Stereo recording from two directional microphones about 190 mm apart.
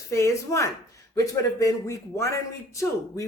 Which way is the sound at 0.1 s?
15° left (ahead or behind).